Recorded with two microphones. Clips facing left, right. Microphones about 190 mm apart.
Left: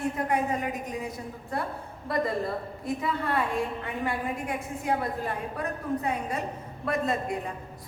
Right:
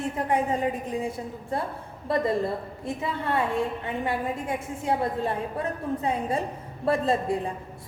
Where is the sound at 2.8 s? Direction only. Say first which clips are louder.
Even; 25° right (ahead or behind).